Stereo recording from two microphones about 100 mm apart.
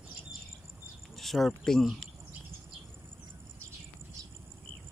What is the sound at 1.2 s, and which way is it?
Speech, centre (ahead or behind).